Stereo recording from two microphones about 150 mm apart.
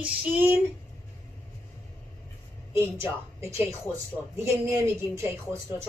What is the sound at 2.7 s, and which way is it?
Speech, 20° right (ahead or behind).